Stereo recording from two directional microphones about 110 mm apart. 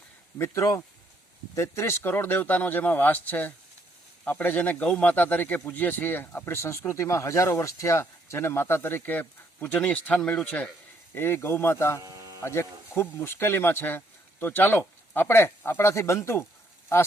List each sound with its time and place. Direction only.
0.3 s speech: 25° left (ahead or behind)
12.0 s a sound: 35° right (ahead or behind)
12.4 s speech: 25° left (ahead or behind)